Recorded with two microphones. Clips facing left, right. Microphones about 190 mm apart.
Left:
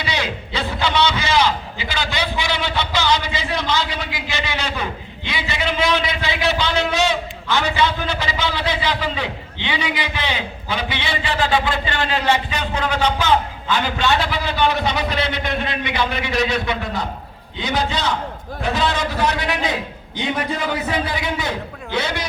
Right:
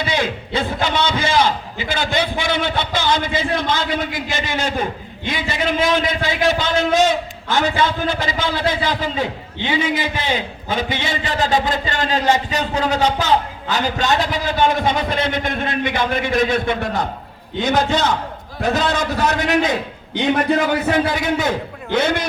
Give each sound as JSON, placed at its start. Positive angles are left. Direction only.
{"t": 0.0, "sound": "a man's voice", "side_deg": -50}
{"t": 20.1, "sound": "a man's voice", "side_deg": -60}